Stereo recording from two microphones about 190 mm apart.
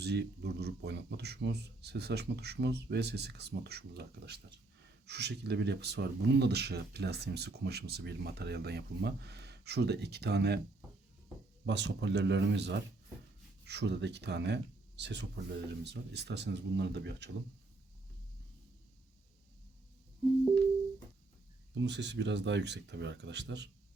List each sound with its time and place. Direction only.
0.0 s speech: 60° right (ahead or behind)
11.6 s speech: 65° right (ahead or behind)
21.8 s speech: 65° right (ahead or behind)